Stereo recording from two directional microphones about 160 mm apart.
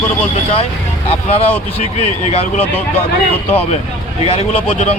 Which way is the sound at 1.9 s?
40° left (ahead or behind).